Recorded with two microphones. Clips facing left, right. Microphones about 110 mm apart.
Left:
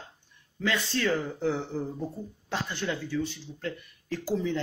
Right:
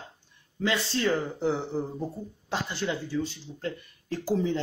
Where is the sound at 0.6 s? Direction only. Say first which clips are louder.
Right 1 dB; 25° right (ahead or behind).